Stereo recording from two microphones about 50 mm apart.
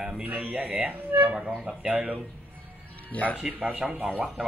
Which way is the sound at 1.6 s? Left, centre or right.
Centre.